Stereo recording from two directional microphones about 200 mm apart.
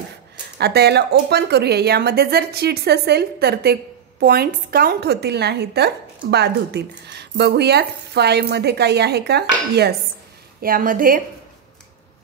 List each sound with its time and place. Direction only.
0.6 s a woman's voice: 55° right (ahead or behind)